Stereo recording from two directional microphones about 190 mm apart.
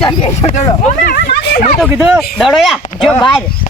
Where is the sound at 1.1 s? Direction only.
60° left (ahead or behind).